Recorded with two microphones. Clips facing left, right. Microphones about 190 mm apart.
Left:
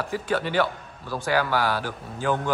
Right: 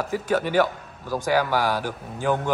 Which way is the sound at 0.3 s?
10° right (ahead or behind).